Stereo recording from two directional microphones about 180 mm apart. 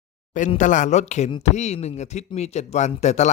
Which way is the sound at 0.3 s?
45° left (ahead or behind).